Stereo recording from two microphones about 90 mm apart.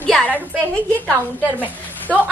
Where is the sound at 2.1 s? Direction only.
10° left (ahead or behind).